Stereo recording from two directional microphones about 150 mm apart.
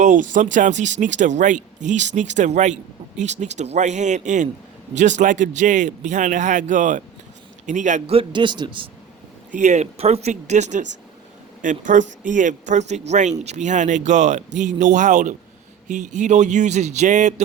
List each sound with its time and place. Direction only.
0.0 s a man's voice: 55° right (ahead or behind)
8.1 s a man's voice: 35° right (ahead or behind)
9.5 s a man's voice: 55° right (ahead or behind)